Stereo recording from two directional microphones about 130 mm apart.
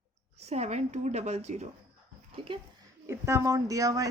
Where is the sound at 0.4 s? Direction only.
55° right (ahead or behind).